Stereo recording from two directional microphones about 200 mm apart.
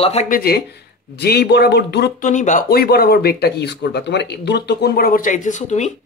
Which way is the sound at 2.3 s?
40° left (ahead or behind).